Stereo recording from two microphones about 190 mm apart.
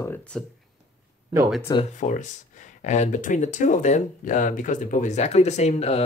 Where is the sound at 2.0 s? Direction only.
40° left (ahead or behind).